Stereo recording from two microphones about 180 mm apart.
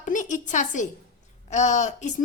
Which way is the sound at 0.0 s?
45° left (ahead or behind).